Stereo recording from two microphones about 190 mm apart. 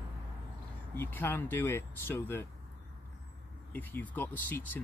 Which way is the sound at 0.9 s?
10° left (ahead or behind).